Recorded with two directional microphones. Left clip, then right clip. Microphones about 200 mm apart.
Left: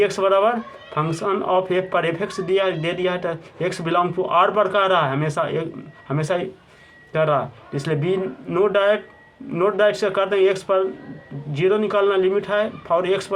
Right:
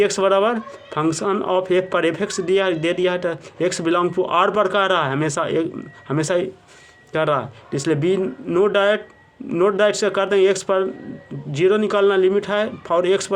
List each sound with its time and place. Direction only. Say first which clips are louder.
0.0 s speech: even; 45° right (ahead or behind)